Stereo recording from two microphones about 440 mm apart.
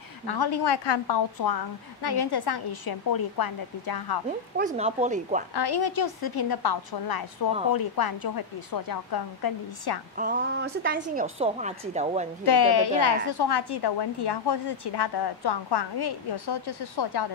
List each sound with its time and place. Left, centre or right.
0.3 s a woman's voice: left
4.6 s a woman's voice: centre
5.5 s a woman's voice: left
10.1 s a woman's voice: centre
12.4 s a woman's voice: left